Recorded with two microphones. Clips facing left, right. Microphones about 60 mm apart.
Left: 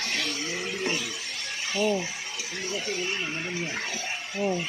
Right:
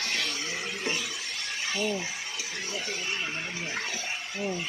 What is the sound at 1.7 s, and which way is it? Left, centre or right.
Mechanisms, centre.